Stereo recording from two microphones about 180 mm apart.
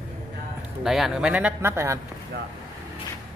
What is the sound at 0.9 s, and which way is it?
Speech, centre (ahead or behind).